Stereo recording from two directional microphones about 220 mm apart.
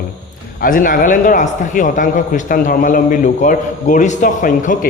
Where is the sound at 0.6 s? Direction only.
40° left (ahead or behind).